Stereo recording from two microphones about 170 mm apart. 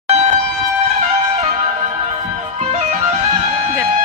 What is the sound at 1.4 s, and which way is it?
Music, 40° right (ahead or behind).